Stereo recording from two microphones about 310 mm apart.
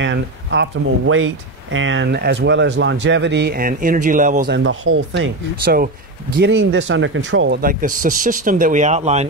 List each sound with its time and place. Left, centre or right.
0.0 s speech: right
4.6 s speech: right